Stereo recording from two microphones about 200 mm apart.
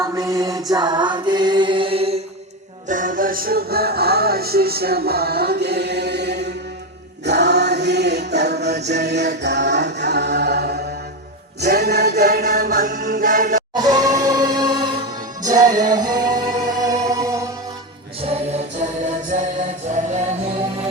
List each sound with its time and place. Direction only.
0.2 s mantra: 20° right (ahead or behind)
2.9 s music: 40° right (ahead or behind)
8.9 s a capella: 55° right (ahead or behind)
11.6 s music: 50° right (ahead or behind)
13.7 s music: 20° right (ahead or behind)
18.2 s music: 30° right (ahead or behind)